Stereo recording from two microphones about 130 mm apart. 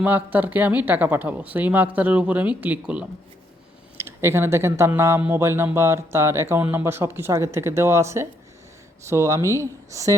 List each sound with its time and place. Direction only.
0.0 s speech: 15° right (ahead or behind)